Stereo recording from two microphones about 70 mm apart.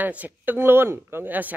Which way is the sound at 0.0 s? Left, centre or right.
Right.